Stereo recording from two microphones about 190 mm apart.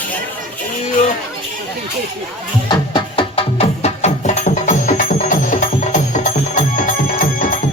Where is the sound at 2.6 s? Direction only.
25° left (ahead or behind).